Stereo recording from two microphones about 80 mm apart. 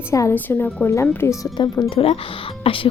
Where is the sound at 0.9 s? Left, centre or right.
Left.